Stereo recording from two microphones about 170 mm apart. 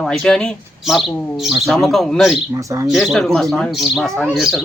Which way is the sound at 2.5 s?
20° right (ahead or behind).